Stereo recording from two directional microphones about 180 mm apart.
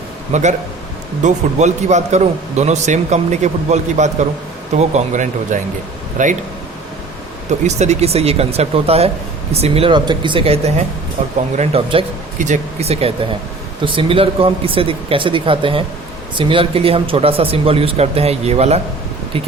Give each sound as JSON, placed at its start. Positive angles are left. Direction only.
{"t": 0.3, "sound": "a man's voice", "side_deg": -40}
{"t": 7.8, "sound": "a man's voice", "side_deg": -35}